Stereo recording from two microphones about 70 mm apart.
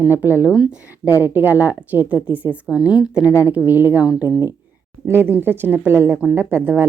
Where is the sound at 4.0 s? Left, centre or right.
Left.